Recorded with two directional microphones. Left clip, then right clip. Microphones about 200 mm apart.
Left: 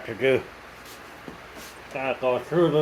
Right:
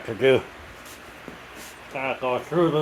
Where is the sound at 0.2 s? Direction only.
35° right (ahead or behind).